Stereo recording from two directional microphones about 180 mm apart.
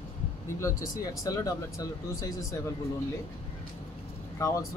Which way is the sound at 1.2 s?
20° left (ahead or behind).